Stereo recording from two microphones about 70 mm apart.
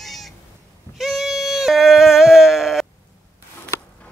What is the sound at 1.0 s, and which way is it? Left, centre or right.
Bleat, centre.